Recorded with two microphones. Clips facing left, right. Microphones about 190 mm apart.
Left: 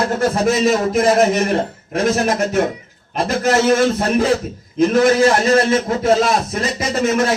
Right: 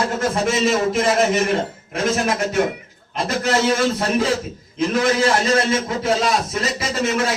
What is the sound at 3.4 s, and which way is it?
A man's voice, 45° left (ahead or behind).